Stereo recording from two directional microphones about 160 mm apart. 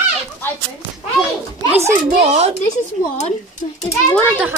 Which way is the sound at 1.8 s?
45° right (ahead or behind).